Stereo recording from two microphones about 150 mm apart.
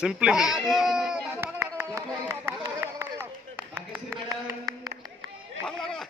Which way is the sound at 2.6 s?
15° right (ahead or behind).